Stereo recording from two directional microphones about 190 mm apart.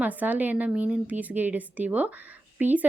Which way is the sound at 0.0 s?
10° right (ahead or behind).